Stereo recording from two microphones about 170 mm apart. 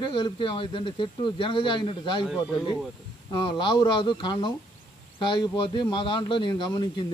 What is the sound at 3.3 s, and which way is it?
Speech, 25° left (ahead or behind).